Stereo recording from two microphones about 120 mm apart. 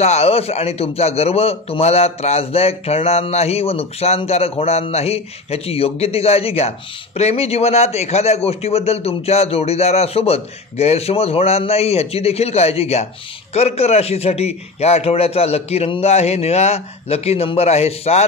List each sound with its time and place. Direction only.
0.0 s a man's voice: 60° left (ahead or behind)